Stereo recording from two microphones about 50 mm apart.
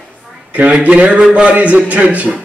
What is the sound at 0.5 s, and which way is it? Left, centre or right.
A man's voice, right.